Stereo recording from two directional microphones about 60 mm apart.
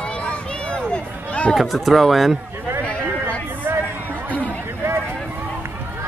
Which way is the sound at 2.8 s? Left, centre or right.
Centre.